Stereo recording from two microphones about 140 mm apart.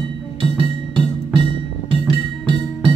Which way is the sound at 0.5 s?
35° right (ahead or behind).